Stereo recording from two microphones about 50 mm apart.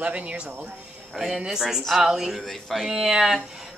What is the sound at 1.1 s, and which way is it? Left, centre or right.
A woman's voice, centre.